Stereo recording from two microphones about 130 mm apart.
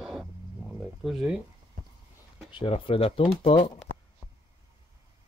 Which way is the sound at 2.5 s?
45° left (ahead or behind).